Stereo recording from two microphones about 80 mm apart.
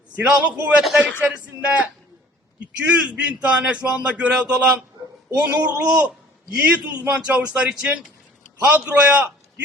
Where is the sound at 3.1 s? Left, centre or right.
Centre.